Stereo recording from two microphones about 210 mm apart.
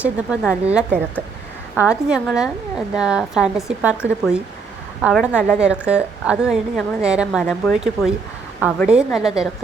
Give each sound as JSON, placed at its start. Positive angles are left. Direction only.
{"t": 0.0, "sound": "a woman's voice", "side_deg": -5}